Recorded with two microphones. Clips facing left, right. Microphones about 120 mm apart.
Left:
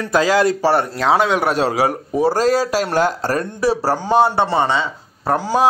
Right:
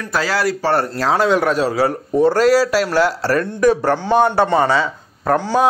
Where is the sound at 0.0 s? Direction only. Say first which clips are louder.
Left 4 dB; 20° left (ahead or behind).